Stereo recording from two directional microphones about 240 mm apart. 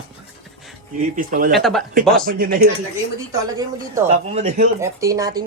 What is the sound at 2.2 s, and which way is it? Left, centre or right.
Speech, right.